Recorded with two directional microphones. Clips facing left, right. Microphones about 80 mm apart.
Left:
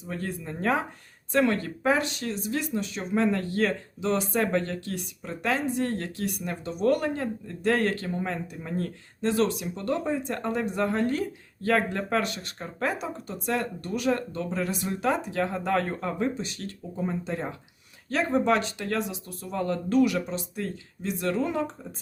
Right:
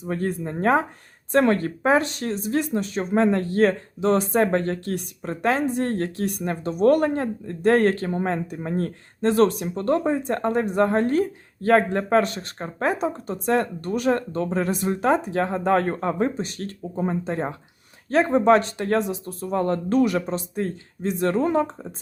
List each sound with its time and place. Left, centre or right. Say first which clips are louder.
0.0 s speech: right 8 dB; right